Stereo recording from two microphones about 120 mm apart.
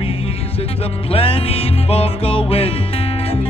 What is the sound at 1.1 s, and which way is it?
Music, 50° left (ahead or behind).